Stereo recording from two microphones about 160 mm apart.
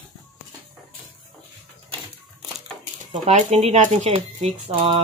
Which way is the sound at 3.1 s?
50° right (ahead or behind).